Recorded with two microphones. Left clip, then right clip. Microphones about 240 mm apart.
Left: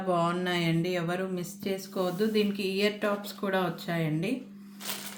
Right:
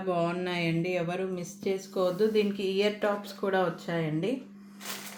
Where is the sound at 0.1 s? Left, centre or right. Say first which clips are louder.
Left 2 dB; left.